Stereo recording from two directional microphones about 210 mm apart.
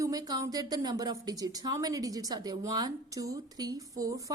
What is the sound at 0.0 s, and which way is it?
A woman's voice, 15° right (ahead or behind).